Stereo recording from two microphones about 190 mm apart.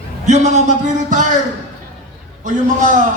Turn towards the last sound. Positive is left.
turn(degrees=-40)  # may be behind; listen again after turning